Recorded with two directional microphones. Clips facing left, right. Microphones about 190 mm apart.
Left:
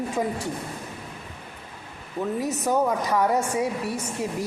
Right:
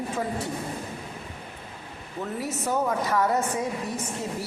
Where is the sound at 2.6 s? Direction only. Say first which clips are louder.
Left 2 dB; 15° left (ahead or behind).